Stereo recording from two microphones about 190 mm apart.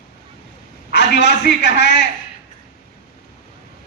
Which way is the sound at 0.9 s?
65° left (ahead or behind).